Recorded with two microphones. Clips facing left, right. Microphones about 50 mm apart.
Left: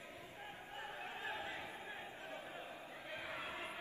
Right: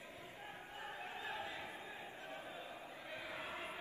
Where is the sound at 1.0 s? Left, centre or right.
Left.